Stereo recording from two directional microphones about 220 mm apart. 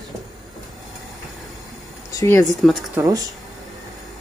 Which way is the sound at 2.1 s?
15° left (ahead or behind).